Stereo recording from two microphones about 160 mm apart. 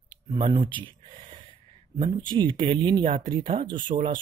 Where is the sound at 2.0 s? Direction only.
30° right (ahead or behind).